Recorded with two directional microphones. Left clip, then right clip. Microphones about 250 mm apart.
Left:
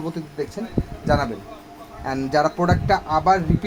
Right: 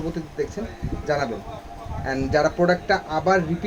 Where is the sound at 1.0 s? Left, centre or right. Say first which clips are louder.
Left 2 dB; left.